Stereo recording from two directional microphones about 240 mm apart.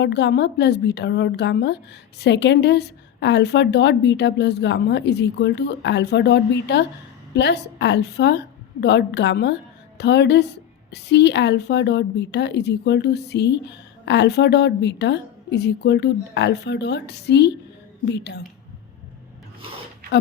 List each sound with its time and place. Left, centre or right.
0.0 s a woman's voice: left